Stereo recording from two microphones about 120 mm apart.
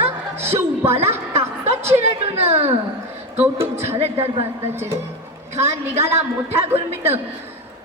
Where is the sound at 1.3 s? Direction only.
60° right (ahead or behind).